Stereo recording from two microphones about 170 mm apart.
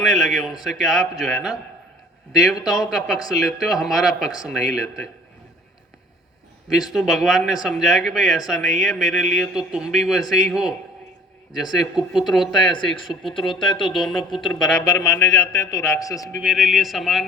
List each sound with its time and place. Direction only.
0.0 s speech: centre (ahead or behind)
6.9 s speech: centre (ahead or behind)
14.8 s a man's voice: 15° left (ahead or behind)
16.4 s speech: centre (ahead or behind)